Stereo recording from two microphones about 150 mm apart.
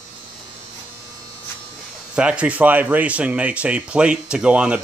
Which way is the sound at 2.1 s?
10° right (ahead or behind).